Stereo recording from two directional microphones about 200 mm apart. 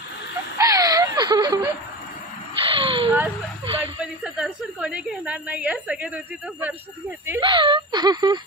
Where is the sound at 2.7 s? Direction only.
25° right (ahead or behind).